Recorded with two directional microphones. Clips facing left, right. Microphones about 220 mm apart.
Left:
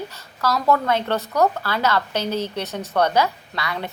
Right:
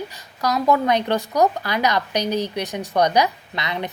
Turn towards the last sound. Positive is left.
turn(degrees=-20)  # may be behind; listen again after turning